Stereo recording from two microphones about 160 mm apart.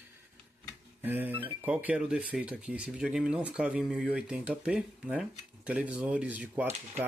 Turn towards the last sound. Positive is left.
turn(degrees=-10)  # may be behind; listen again after turning